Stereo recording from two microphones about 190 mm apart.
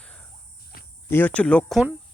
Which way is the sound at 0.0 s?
5° left (ahead or behind).